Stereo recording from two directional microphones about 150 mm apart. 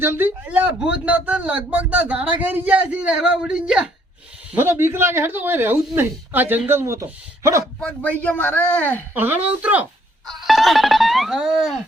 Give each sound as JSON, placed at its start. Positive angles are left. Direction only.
{"t": 0.0, "sound": "speech", "side_deg": -15}
{"t": 7.6, "sound": "speech", "side_deg": 5}
{"t": 9.1, "sound": "speech", "side_deg": -10}
{"t": 10.2, "sound": "music", "side_deg": 0}